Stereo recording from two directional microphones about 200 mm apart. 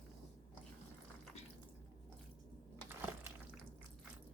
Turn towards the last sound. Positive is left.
turn(degrees=-10)  # may be behind; listen again after turning